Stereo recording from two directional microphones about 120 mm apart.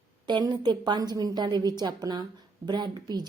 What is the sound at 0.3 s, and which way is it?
A woman's voice, 35° right (ahead or behind).